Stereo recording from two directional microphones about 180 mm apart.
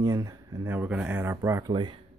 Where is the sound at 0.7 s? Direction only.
5° right (ahead or behind); by 1.9 s 25° right (ahead or behind).